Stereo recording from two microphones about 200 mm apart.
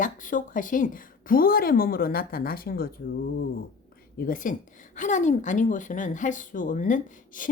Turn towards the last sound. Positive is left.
turn(degrees=40)  # may be behind; listen again after turning